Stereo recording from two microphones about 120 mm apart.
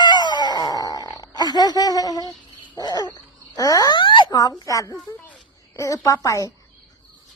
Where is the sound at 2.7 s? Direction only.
35° left (ahead or behind).